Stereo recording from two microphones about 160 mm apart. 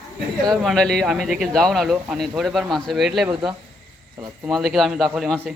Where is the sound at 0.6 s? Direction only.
Centre (ahead or behind).